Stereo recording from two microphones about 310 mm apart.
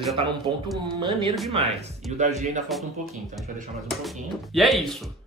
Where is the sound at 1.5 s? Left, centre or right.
Centre.